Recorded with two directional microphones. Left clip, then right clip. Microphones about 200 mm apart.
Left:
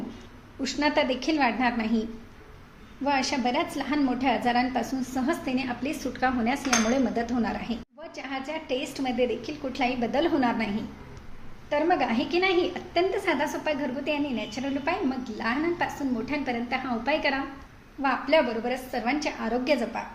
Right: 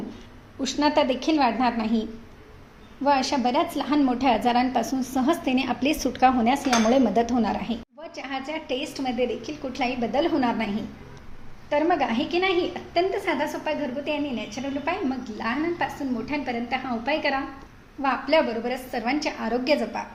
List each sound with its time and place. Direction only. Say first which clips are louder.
0.6 s a woman's voice: right 3 dB; 10° right (ahead or behind)
3.0 s a woman's voice: right 4 dB; 15° right (ahead or behind)
8.1 s a woman's voice: right 2 dB; 5° right (ahead or behind)